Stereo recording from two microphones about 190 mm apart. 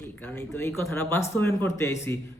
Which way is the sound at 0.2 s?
10° left (ahead or behind).